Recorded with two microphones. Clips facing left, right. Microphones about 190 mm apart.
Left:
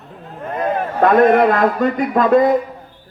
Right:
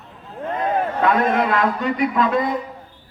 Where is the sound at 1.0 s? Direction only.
50° left (ahead or behind).